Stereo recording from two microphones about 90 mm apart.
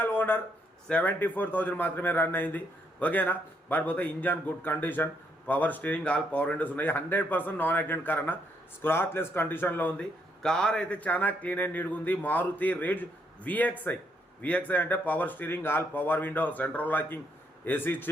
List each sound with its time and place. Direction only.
0.0 s a sound: 25° left (ahead or behind)
0.9 s a man's voice: 15° left (ahead or behind)
10.4 s a man's voice: 10° left (ahead or behind); by 18.1 s 25° left (ahead or behind)